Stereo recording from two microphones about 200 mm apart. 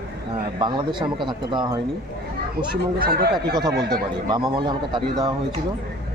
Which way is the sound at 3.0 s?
50° right (ahead or behind).